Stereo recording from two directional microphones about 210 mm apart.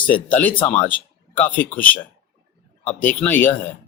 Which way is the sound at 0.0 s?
5° left (ahead or behind).